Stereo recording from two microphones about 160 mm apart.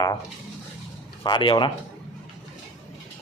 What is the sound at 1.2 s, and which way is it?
Speech, 30° left (ahead or behind).